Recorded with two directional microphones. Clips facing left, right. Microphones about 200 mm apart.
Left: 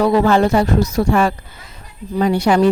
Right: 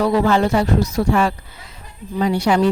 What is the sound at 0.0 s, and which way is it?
A woman's voice, 45° left (ahead or behind).